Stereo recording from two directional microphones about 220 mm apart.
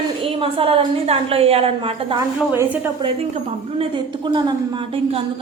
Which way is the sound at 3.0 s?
25° right (ahead or behind).